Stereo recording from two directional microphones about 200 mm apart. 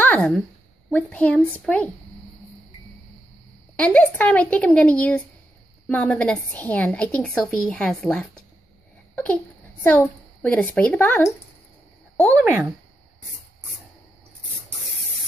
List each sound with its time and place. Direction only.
0.0 s a woman's voice: 5° left (ahead or behind)
3.7 s a woman's voice: 5° left (ahead or behind)
9.1 s a sound: 5° left (ahead or behind)
9.8 s a woman's voice: 5° left (ahead or behind)